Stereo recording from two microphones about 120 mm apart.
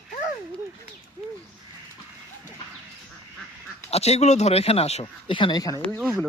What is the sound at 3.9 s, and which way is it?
Speech, 60° left (ahead or behind).